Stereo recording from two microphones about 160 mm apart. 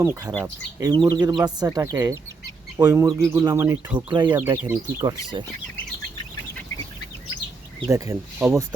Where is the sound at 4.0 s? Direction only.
30° right (ahead or behind).